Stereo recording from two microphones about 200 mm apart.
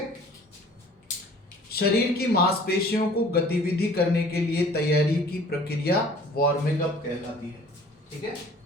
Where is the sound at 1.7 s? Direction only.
50° left (ahead or behind).